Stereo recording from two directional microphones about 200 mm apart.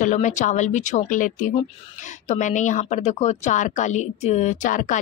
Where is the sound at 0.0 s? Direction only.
40° left (ahead or behind).